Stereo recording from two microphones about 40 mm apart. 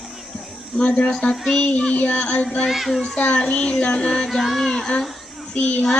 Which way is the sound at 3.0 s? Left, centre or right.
Left.